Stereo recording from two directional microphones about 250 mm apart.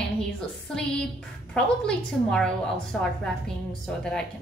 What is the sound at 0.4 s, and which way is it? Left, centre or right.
A woman's voice, centre.